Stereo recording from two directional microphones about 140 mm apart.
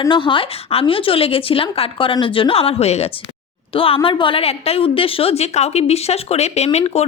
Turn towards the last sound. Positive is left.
turn(degrees=50)  # may be behind; listen again after turning